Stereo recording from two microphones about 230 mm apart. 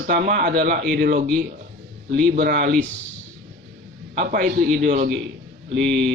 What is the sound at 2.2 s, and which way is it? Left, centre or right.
Speech, right.